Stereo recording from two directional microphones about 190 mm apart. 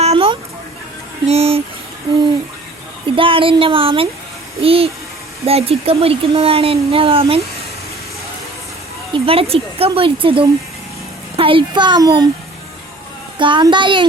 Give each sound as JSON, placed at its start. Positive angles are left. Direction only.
{"t": 0.0, "sound": "a sound", "side_deg": -30}
{"t": 1.3, "sound": "speech", "side_deg": -30}
{"t": 3.2, "sound": "speech", "side_deg": -30}
{"t": 9.1, "sound": "speech", "side_deg": -30}
{"t": 13.4, "sound": "speech", "side_deg": -25}